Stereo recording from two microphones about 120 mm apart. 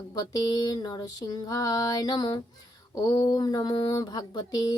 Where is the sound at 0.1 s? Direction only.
30° left (ahead or behind).